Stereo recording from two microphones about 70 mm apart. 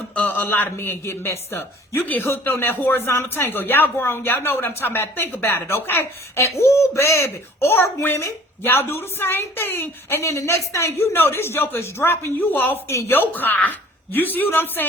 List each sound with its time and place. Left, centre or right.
0.1 s a man's voice: left